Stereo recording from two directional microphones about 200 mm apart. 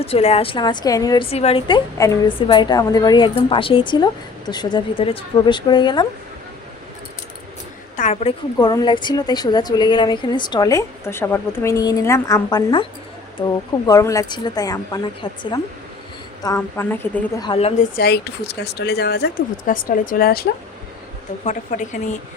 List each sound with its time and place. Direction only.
0.0 s a woman's voice: 30° left (ahead or behind)
7.9 s speech: 35° left (ahead or behind)
8.5 s a woman's voice: 20° left (ahead or behind)
16.6 s speech: 10° left (ahead or behind)
17.5 s a woman's voice: 30° left (ahead or behind)
17.9 s speech: 55° left (ahead or behind)
21.4 s speech: 40° left (ahead or behind)